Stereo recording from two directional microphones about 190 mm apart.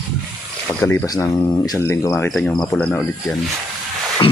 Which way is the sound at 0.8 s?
15° left (ahead or behind).